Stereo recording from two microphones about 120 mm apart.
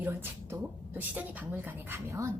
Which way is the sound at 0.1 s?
20° right (ahead or behind).